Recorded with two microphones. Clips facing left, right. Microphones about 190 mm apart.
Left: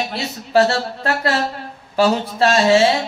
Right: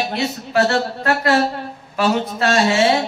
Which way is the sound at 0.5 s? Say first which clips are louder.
Left 2 dB; 30° left (ahead or behind).